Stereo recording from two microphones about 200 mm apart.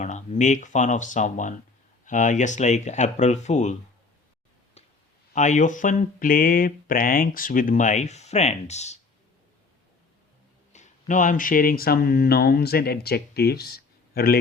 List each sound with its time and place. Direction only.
0.0 s speech: 35° left (ahead or behind)
5.3 s speech: 35° left (ahead or behind)
10.7 s speech: 40° left (ahead or behind)